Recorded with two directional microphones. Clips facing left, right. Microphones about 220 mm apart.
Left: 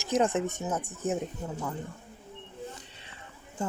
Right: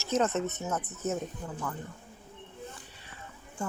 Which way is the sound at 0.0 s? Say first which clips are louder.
Left 2 dB; 15° left (ahead or behind).